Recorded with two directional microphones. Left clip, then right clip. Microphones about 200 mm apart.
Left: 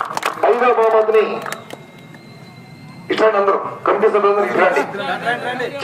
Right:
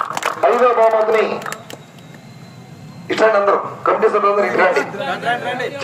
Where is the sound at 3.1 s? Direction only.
55° right (ahead or behind); by 4.8 s 35° right (ahead or behind).